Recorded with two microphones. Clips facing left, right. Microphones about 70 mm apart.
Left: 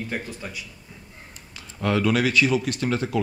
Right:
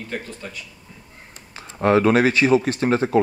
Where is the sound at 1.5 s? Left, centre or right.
Right.